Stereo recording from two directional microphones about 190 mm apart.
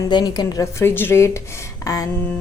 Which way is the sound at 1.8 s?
20° left (ahead or behind).